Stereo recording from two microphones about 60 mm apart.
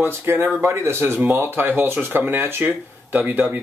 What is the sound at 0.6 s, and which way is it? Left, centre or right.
Speech, right.